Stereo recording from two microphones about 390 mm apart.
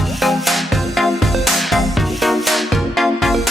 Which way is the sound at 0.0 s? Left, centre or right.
Centre.